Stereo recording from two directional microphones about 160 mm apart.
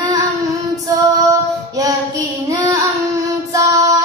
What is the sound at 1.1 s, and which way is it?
Female singing, 20° right (ahead or behind).